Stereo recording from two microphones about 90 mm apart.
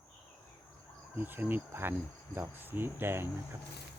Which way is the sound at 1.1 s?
20° right (ahead or behind).